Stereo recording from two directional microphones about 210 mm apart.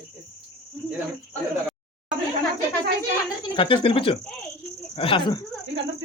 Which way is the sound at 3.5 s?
25° left (ahead or behind).